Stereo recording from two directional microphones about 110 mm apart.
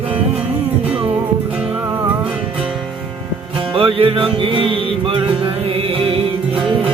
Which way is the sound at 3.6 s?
55° right (ahead or behind).